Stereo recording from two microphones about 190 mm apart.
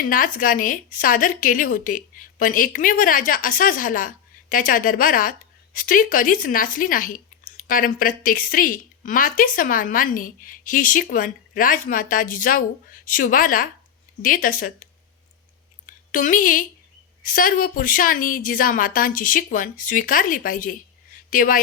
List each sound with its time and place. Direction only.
0.0 s a woman's voice: 45° left (ahead or behind)
16.1 s a woman's voice: 45° left (ahead or behind)